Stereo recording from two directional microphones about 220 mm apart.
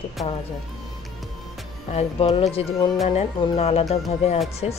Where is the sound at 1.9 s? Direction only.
30° left (ahead or behind).